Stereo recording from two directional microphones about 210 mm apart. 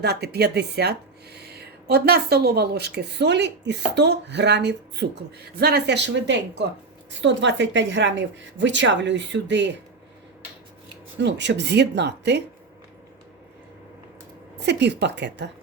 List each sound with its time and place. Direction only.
0.0 s a woman's voice: 50° right (ahead or behind)
11.2 s a woman's voice: 55° right (ahead or behind)
14.6 s a woman's voice: 55° right (ahead or behind)